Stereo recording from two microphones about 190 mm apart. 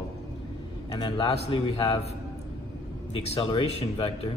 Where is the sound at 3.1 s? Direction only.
30° left (ahead or behind).